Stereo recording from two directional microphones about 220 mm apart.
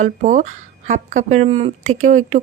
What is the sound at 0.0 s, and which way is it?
A woman's voice, 35° right (ahead or behind).